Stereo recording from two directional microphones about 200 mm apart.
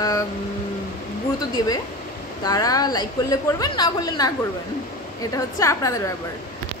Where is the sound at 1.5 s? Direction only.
20° left (ahead or behind).